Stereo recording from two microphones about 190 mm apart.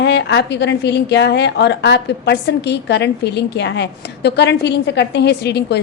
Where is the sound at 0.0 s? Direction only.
70° left (ahead or behind).